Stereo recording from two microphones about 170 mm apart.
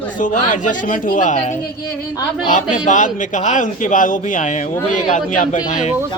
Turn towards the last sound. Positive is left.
turn(degrees=45)  # may be behind; listen again after turning